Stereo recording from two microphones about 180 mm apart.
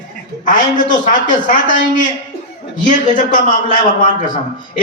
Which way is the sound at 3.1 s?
45° left (ahead or behind).